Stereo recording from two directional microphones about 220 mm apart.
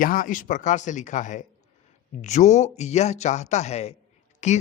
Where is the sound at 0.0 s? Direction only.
40° left (ahead or behind).